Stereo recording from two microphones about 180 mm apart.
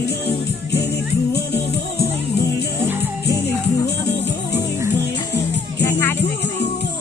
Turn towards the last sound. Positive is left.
turn(degrees=10)  # may be behind; listen again after turning